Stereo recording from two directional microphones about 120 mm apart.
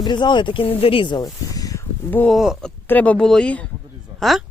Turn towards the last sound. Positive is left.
turn(degrees=0)  # may be behind; listen again after turning